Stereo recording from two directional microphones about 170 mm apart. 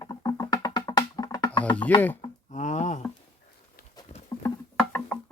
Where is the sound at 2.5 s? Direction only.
45° left (ahead or behind).